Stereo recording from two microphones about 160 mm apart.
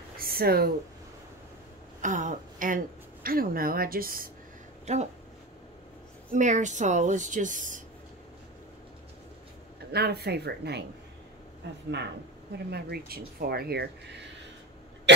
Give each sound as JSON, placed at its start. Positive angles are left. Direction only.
{"t": 0.2, "sound": "a sound", "side_deg": -70}
{"t": 2.0, "sound": "a woman's voice", "side_deg": -50}
{"t": 3.3, "sound": "a woman's voice", "side_deg": -65}
{"t": 4.9, "sound": "a woman's voice", "side_deg": -45}
{"t": 6.3, "sound": "a woman's voice", "side_deg": -50}
{"t": 9.9, "sound": "speech", "side_deg": -90}
{"t": 12.5, "sound": "speech", "side_deg": -85}
{"t": 15.1, "sound": "a sound", "side_deg": -90}